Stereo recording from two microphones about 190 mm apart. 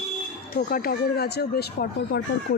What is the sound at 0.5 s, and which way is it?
Speech, 50° left (ahead or behind).